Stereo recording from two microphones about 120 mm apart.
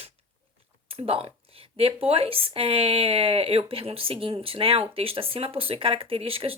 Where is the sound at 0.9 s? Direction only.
55° right (ahead or behind).